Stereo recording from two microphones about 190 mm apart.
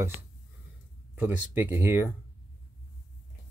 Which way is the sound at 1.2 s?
10° right (ahead or behind).